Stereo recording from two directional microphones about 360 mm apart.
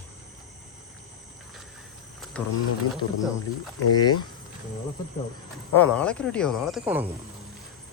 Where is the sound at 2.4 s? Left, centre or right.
Centre.